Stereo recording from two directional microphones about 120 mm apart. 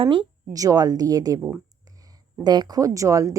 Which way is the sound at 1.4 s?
10° right (ahead or behind).